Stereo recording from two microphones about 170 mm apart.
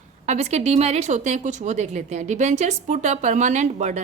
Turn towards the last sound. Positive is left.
turn(degrees=-45)  # may be behind; listen again after turning